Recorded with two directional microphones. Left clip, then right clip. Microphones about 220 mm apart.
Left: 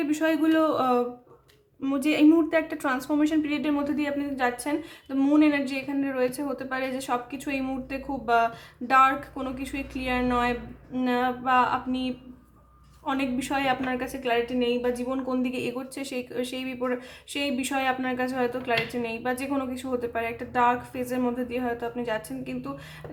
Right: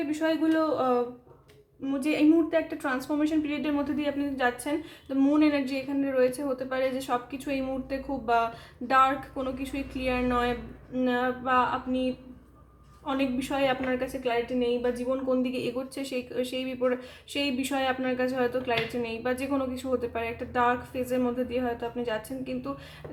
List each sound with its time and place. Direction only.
0.1 s a man's voice: 30° left (ahead or behind); by 22.7 s 10° left (ahead or behind)